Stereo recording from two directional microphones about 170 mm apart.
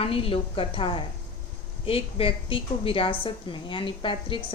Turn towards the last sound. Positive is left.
turn(degrees=30)  # may be behind; listen again after turning